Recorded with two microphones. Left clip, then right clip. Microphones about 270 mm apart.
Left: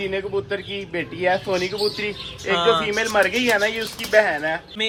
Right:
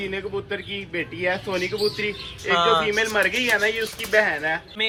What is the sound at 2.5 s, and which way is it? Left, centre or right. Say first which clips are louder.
Speech: even; centre.